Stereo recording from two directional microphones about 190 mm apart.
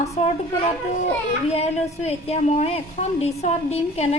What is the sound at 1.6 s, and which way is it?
A woman's voice, 35° left (ahead or behind).